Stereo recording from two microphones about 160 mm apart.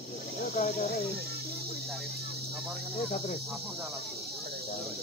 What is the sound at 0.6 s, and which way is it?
Cricket, 55° left (ahead or behind).